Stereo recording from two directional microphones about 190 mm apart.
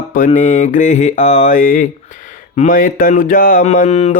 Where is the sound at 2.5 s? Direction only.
45° left (ahead or behind).